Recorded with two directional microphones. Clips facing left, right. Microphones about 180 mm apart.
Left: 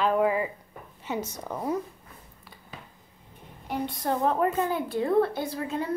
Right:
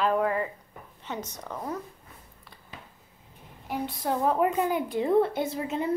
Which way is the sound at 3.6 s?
5° right (ahead or behind).